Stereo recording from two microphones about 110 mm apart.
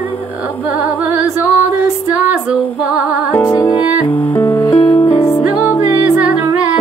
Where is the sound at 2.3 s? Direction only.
15° right (ahead or behind).